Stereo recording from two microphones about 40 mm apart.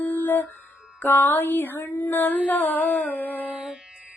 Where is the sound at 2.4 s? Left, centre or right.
Left.